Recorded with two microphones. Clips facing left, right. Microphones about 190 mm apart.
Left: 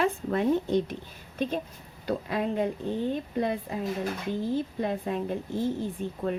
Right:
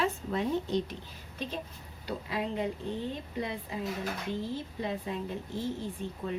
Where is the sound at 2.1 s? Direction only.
50° left (ahead or behind).